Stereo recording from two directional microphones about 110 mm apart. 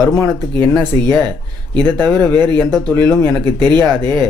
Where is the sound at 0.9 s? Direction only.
55° right (ahead or behind).